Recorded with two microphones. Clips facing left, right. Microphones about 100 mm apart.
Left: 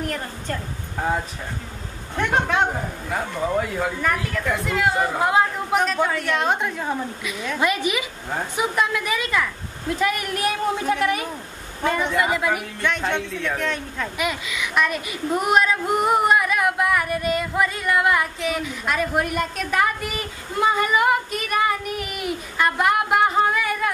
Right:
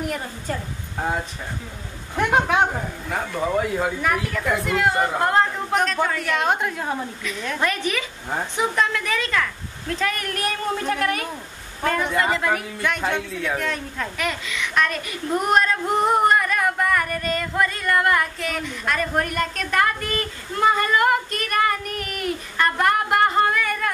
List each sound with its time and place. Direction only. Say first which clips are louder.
0.0 s a man's voice: even; 5° right (ahead or behind)
2.1 s a man's voice: right 2 dB; 10° right (ahead or behind)
7.3 s a man's voice: left 2 dB; 10° left (ahead or behind)
12.8 s a man's voice: left 2 dB; 5° right (ahead or behind)
14.1 s speech: left 2 dB; 10° left (ahead or behind)